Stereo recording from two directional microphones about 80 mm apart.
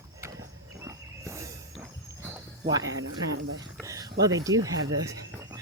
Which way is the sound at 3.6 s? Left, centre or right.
Right.